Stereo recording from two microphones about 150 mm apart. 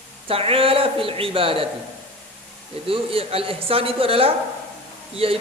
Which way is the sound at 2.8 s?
40° right (ahead or behind).